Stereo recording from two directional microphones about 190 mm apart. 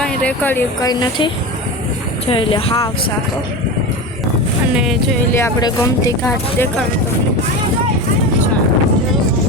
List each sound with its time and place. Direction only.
0.0 s speech: 5° left (ahead or behind)
0.9 s speech: 20° left (ahead or behind)
4.7 s speech: 5° right (ahead or behind)
5.3 s speech: 15° left (ahead or behind)